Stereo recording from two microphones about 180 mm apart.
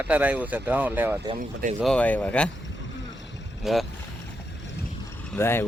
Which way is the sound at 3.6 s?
Centre (ahead or behind).